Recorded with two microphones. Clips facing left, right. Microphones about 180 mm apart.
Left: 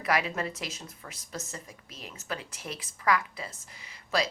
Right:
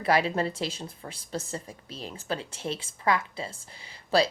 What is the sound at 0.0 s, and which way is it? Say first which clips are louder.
Speech: right 4 dB; 30° right (ahead or behind).